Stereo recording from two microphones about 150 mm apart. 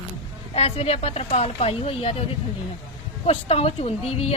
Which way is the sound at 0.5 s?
40° left (ahead or behind).